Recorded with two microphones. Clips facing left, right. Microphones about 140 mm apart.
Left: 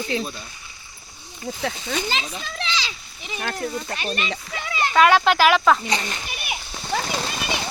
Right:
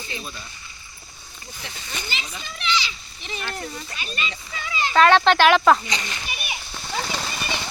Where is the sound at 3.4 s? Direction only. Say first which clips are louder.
Left 5 dB; 55° left (ahead or behind).